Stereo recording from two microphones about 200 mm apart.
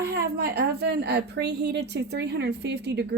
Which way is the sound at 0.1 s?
55° right (ahead or behind).